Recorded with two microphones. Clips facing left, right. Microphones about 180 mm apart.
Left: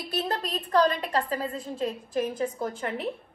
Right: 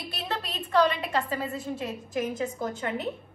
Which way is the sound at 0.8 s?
40° left (ahead or behind).